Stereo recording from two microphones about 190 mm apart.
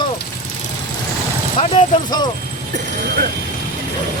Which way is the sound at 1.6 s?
25° left (ahead or behind).